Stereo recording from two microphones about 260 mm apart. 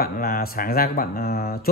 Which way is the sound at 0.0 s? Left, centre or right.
Left.